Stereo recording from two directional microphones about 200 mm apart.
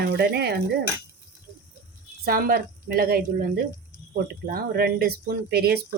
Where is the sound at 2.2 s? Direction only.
50° right (ahead or behind).